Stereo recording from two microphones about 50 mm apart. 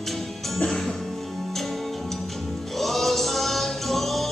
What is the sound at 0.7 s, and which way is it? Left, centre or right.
Music, centre.